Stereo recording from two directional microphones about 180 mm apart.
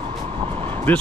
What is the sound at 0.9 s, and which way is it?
Speech, 10° left (ahead or behind).